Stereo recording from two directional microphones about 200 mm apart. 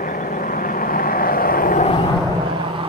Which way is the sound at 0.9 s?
45° left (ahead or behind).